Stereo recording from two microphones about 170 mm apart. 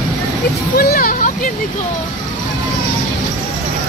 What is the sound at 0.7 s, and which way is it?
Speech, 60° left (ahead or behind).